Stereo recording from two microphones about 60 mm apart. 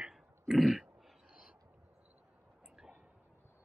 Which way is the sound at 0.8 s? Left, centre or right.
Centre.